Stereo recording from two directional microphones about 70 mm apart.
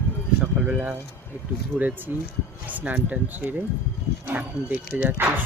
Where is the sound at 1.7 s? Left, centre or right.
Centre.